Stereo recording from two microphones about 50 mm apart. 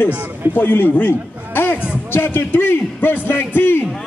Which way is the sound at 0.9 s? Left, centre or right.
Left.